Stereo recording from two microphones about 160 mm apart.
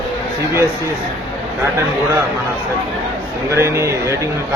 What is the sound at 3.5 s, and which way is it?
Speech, 15° right (ahead or behind).